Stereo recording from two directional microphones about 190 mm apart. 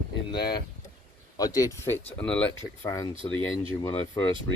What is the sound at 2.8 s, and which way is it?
Speech, 15° left (ahead or behind).